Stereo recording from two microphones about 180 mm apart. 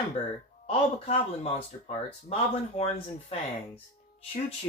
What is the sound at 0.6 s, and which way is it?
Speech, 35° left (ahead or behind).